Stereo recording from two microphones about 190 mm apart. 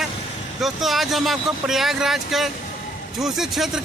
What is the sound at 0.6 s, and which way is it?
Speech, centre (ahead or behind).